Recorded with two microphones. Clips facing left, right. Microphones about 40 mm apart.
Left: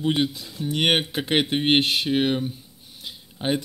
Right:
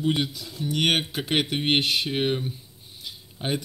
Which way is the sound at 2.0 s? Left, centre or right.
Left.